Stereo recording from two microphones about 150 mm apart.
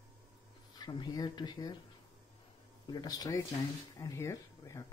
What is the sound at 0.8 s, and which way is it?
Speech, 30° left (ahead or behind).